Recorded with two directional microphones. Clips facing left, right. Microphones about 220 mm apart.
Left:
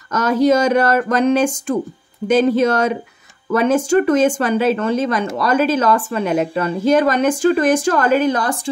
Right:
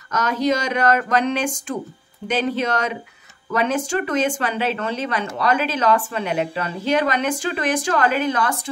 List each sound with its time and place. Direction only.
0.1 s speech: 45° left (ahead or behind)